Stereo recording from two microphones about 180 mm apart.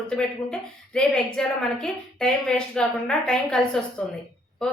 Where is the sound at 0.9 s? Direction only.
5° left (ahead or behind).